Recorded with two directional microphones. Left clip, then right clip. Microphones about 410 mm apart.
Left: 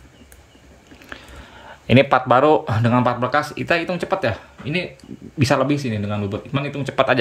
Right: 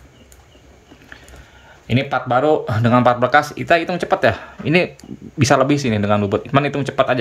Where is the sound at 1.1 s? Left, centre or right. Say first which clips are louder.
Left 4 dB; centre.